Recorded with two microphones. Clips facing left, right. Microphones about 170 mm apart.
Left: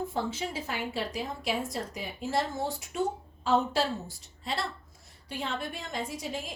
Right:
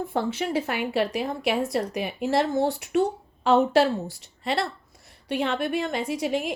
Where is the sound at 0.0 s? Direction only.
65° right (ahead or behind).